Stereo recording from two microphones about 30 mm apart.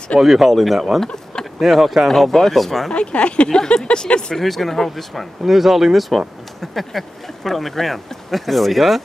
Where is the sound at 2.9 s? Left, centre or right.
Left.